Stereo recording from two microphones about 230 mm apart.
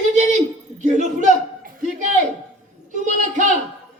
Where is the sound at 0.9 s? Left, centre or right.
Right.